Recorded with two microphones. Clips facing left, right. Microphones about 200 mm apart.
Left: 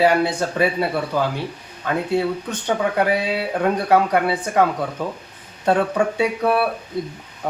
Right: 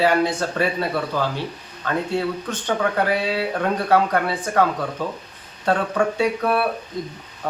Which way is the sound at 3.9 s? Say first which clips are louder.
Left 1 dB; 15° left (ahead or behind).